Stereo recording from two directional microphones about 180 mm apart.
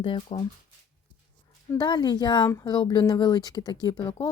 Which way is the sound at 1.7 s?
25° left (ahead or behind).